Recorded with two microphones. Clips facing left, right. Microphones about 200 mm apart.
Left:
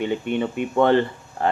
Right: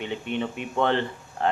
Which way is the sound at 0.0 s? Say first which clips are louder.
Left 7 dB; 50° left (ahead or behind).